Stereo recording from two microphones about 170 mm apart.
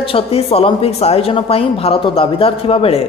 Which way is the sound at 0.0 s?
35° left (ahead or behind).